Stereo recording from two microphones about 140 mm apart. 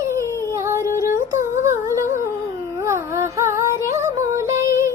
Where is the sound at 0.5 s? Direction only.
20° right (ahead or behind).